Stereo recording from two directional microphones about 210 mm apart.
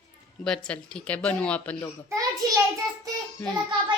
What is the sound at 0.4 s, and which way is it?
Speech, 5° left (ahead or behind).